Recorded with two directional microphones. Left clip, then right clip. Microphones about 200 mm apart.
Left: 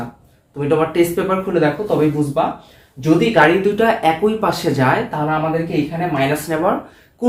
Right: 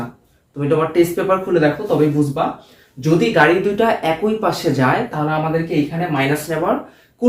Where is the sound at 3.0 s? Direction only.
15° left (ahead or behind).